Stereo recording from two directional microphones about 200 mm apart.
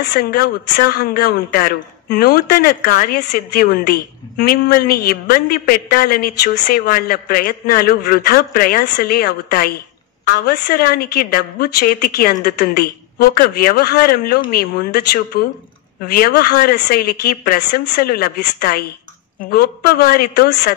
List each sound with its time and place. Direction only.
0.1 s speech: 50° left (ahead or behind)